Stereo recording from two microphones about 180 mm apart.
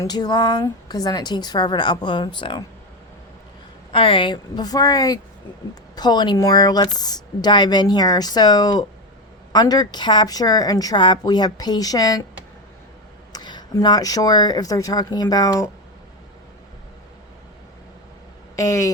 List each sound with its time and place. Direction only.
0.0 s a woman's voice: 20° left (ahead or behind)
3.9 s a woman's voice: 30° left (ahead or behind)
13.3 s a woman's voice: 25° left (ahead or behind)
18.5 s speech: 15° left (ahead or behind)